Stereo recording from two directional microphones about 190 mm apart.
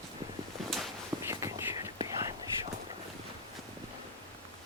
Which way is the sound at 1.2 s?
15° right (ahead or behind).